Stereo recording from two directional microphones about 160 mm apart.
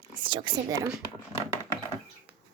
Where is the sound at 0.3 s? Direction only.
30° right (ahead or behind).